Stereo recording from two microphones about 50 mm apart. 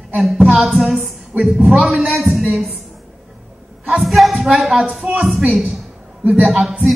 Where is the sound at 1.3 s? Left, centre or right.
Right.